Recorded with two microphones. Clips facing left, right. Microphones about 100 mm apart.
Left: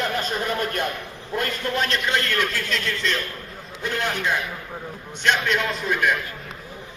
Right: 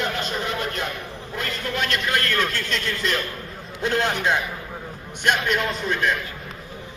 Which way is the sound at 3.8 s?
25° right (ahead or behind).